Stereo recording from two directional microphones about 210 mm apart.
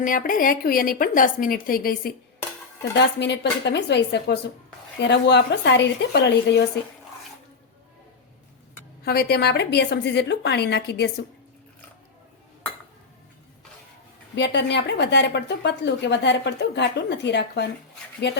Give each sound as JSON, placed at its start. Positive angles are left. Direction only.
{"t": 0.0, "sound": "a woman's voice", "side_deg": 40}
{"t": 3.2, "sound": "a woman's voice", "side_deg": 55}
{"t": 9.0, "sound": "a woman's voice", "side_deg": 50}
{"t": 14.3, "sound": "a woman's voice", "side_deg": 55}